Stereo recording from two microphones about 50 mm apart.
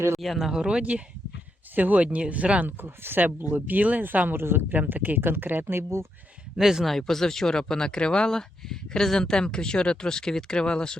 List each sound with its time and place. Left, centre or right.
0.2 s speech: centre
0.6 s speech: right
1.7 s speech: right
2.6 s speech: right
4.4 s speech: right
6.6 s speech: centre
6.8 s speech: centre